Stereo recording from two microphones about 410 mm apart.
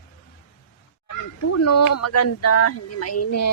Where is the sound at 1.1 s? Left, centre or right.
Left.